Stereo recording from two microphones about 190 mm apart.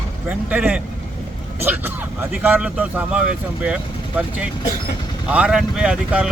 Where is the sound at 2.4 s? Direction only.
10° right (ahead or behind).